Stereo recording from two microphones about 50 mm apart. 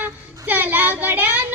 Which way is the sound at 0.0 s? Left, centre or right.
Right.